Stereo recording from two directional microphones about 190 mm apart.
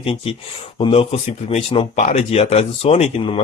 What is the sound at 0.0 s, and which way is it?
Speech, 30° left (ahead or behind).